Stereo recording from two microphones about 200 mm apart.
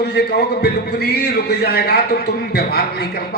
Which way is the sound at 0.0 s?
55° left (ahead or behind).